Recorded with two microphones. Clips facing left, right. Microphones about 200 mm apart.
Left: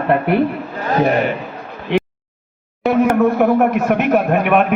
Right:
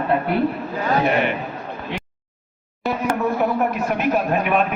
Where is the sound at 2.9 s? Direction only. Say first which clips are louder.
Left 8 dB; 60° left (ahead or behind).